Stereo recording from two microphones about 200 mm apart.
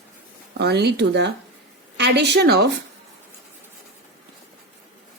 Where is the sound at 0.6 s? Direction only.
55° right (ahead or behind).